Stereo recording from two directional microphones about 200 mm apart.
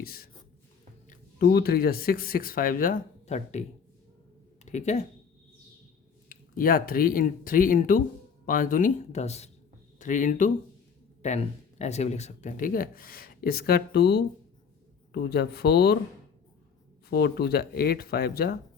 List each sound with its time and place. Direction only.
0.0 s a sound: 50° left (ahead or behind)
1.1 s speech: 50° left (ahead or behind)
4.6 s speech: 35° left (ahead or behind)
6.2 s speech: 45° left (ahead or behind)
17.1 s speech: 55° left (ahead or behind)